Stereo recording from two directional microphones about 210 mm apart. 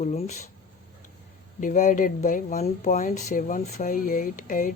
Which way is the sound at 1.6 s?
35° left (ahead or behind).